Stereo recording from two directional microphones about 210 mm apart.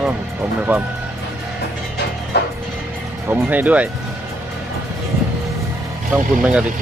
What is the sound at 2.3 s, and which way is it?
Music, 55° left (ahead or behind).